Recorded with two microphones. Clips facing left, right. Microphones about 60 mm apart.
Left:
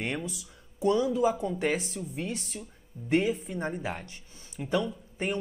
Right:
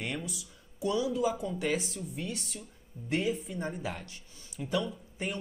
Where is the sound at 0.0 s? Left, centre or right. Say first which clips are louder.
Left 4 dB; left.